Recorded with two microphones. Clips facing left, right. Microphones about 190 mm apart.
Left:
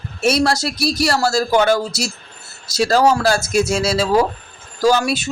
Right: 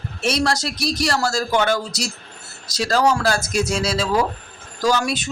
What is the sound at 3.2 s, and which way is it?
Speech, 10° left (ahead or behind).